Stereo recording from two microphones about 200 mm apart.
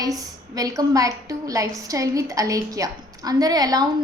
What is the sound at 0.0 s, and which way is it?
A woman's voice, 20° right (ahead or behind).